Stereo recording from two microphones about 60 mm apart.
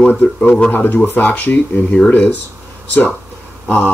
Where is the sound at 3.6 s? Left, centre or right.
Left.